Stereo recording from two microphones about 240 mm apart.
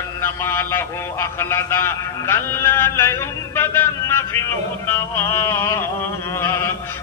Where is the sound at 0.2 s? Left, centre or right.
Centre.